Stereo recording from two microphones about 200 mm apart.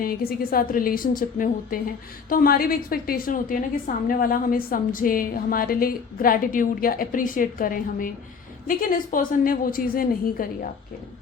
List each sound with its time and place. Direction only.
0.0 s a woman's voice: 50° left (ahead or behind)